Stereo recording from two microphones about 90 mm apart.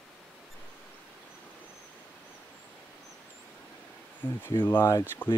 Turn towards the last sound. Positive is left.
turn(degrees=20)  # may be behind; listen again after turning